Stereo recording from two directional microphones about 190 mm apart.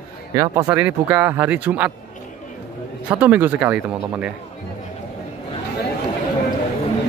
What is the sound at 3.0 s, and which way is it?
Speech, 5° right (ahead or behind).